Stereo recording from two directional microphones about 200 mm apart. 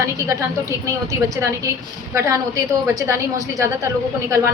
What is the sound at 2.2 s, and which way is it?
A woman's voice, 15° right (ahead or behind).